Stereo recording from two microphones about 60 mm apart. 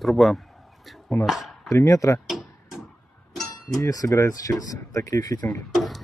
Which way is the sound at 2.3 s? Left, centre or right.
Centre.